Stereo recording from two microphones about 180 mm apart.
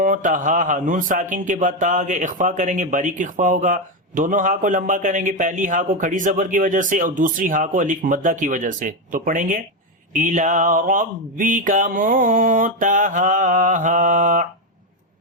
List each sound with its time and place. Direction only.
0.0 s a man's voice: 50° right (ahead or behind)